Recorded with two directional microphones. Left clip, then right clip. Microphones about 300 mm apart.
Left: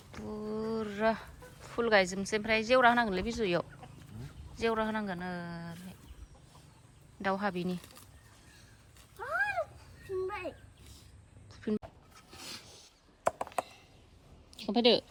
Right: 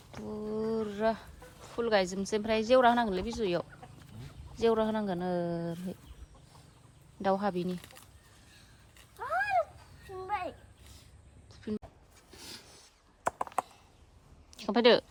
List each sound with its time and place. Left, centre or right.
0.1 s speech: centre
3.9 s chicken: centre
4.5 s speech: centre
7.2 s speech: centre
8.5 s cat: centre
10.0 s a sound: centre
11.5 s dog: centre
12.3 s a sound: centre
14.5 s a woman's voice: centre